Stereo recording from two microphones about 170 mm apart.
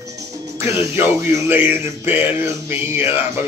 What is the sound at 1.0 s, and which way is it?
Speech, 15° right (ahead or behind).